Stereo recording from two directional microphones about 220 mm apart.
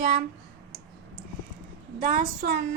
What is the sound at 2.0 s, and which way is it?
Speech, 35° right (ahead or behind).